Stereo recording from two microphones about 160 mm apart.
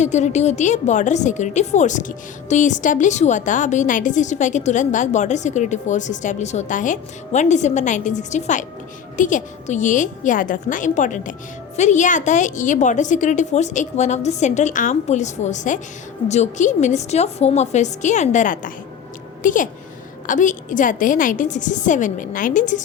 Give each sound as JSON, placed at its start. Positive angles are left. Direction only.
{"t": 0.0, "sound": "a woman's voice", "side_deg": 45}